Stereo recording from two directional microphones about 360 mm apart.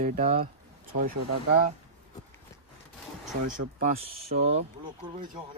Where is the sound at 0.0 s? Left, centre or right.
Right.